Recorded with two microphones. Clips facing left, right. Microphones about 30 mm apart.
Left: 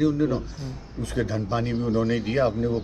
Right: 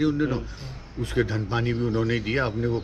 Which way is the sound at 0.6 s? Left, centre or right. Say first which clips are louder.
Even; right.